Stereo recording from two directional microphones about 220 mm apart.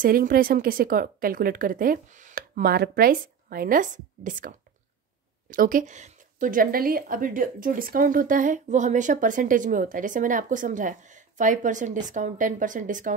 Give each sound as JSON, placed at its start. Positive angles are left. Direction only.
{"t": 0.0, "sound": "a woman's voice", "side_deg": -40}